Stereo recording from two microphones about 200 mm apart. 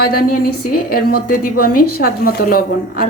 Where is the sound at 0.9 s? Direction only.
45° left (ahead or behind).